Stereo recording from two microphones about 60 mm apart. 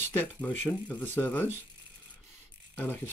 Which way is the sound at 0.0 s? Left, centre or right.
Left.